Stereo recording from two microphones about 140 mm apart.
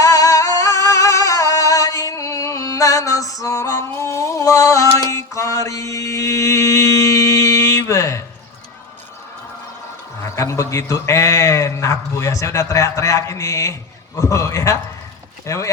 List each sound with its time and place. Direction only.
0.0 s music: 25° left (ahead or behind)
10.2 s a man's voice: 20° left (ahead or behind)